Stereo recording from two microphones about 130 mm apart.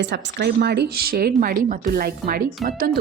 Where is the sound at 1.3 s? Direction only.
90° right.